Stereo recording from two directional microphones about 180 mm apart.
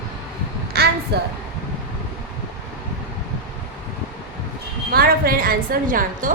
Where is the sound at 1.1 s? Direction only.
65° right (ahead or behind).